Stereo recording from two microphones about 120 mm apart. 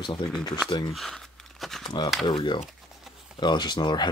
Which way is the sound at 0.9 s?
Centre (ahead or behind).